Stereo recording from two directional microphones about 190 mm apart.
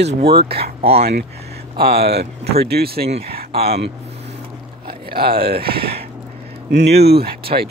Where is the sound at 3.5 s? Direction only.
30° right (ahead or behind).